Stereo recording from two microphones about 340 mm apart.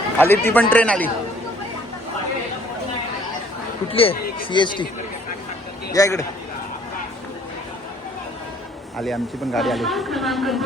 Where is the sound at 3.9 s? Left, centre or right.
Centre.